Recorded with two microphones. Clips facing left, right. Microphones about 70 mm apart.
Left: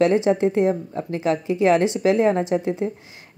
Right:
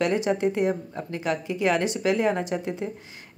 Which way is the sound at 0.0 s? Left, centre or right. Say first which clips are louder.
Left 6 dB; left.